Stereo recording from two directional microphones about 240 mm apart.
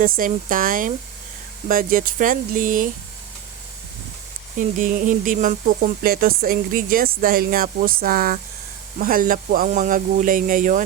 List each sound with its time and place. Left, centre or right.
0.0 s speech: right
4.5 s speech: right